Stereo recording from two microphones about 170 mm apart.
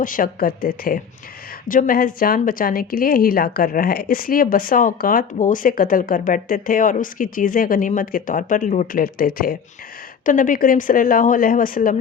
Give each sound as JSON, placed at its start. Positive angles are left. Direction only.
{"t": 0.0, "sound": "a woman's voice", "side_deg": 55}